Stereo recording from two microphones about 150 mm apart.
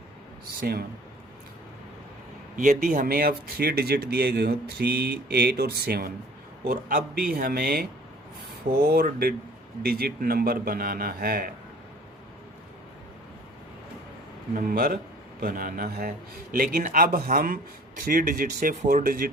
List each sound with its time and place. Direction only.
0.6 s speech: 90° right
2.6 s speech: 60° right (ahead or behind); by 6.1 s 90° right
6.7 s a man's voice: 75° right (ahead or behind)
14.5 s a man's voice: 75° right (ahead or behind)